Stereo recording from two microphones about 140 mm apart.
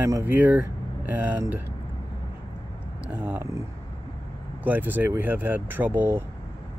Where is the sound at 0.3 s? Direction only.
10° right (ahead or behind).